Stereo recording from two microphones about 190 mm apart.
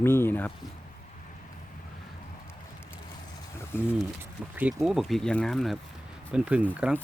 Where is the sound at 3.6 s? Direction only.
10° left (ahead or behind).